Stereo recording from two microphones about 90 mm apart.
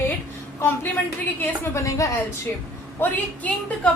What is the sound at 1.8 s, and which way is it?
Speech, 35° left (ahead or behind).